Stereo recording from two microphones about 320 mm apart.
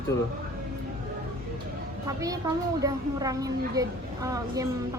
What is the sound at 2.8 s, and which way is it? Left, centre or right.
A woman's voice, centre.